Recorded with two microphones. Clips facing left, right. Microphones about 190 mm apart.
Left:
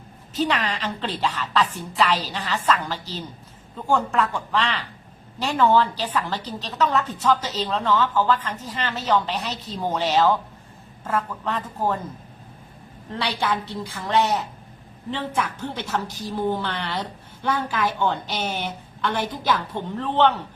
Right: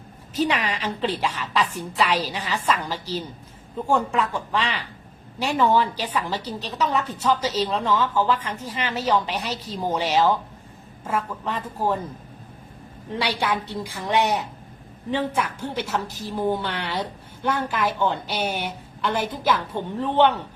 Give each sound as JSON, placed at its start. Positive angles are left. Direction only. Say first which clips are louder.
{"t": 0.3, "sound": "a woman's voice", "louder": "even", "side_deg": -10}
{"t": 13.1, "sound": "a woman's voice", "louder": "right 1 dB", "side_deg": -10}